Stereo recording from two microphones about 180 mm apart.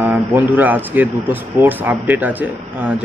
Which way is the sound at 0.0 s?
10° right (ahead or behind).